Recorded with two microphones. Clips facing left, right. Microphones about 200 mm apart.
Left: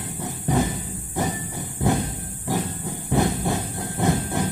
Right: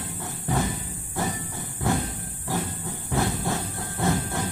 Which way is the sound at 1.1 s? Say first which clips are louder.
Left 3 dB; 15° left (ahead or behind).